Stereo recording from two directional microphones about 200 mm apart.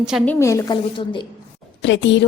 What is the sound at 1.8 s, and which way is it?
Speech, 65° left (ahead or behind).